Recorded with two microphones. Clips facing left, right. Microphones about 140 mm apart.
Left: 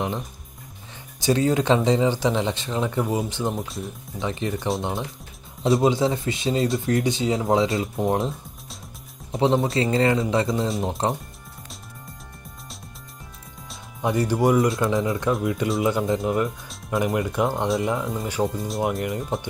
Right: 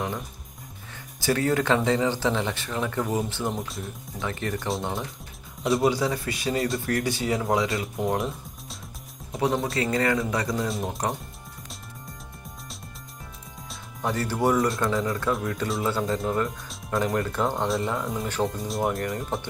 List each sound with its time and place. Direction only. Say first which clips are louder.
1.2 s speech: left 3 dB; 20° left (ahead or behind)
3.5 s speech: left 3 dB; centre (ahead or behind)
4.2 s speech: left 3 dB; 20° left (ahead or behind)
5.8 s speech: left 1 dB; 25° left (ahead or behind)
9.3 s speech: left 5 dB; 25° left (ahead or behind)
14.0 s speech: left 4 dB; 15° left (ahead or behind)